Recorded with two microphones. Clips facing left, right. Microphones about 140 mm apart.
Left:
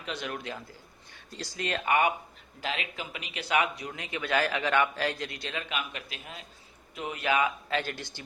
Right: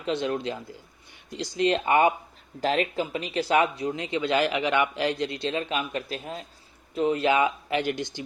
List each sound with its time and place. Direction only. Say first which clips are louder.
0.0 s a man's voice: right 9 dB; 25° right (ahead or behind)
2.6 s a man's voice: right 10 dB; 40° right (ahead or behind); by 8.2 s 20° right (ahead or behind)